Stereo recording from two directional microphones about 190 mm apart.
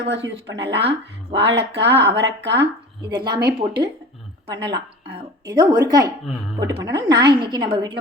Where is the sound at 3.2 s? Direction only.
55° right (ahead or behind).